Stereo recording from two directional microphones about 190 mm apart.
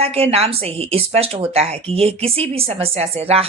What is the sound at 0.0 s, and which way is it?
A woman's voice, 30° right (ahead or behind).